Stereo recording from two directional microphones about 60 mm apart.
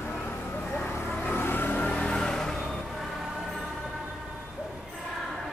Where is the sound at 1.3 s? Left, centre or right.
Left.